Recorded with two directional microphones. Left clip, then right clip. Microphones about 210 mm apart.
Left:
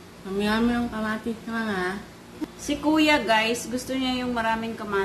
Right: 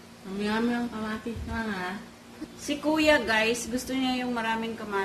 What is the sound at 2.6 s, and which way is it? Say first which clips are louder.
A woman's voice: left 4 dB; centre (ahead or behind).